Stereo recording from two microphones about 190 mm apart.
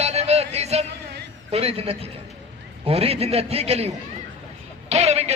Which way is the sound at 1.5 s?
30° right (ahead or behind).